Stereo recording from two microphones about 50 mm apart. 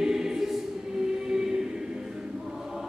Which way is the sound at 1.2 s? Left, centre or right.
Centre.